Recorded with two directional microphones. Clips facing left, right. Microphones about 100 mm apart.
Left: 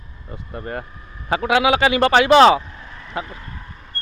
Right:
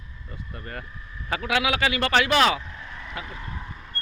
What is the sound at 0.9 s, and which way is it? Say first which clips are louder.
Vehicle: left 1 dB; 45° left (ahead or behind).